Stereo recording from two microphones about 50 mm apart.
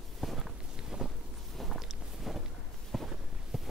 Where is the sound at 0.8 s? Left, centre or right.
Centre.